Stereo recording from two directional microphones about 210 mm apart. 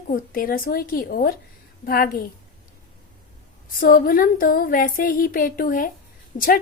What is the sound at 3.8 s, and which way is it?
Speech, 40° left (ahead or behind).